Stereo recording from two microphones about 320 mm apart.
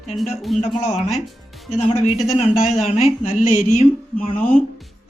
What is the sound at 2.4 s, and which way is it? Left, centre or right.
Speech, centre.